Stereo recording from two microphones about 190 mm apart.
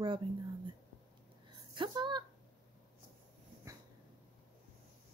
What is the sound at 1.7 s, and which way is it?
Speech, 25° right (ahead or behind).